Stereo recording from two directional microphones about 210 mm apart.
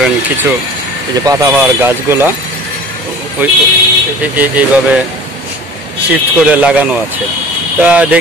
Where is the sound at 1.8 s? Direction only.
10° right (ahead or behind).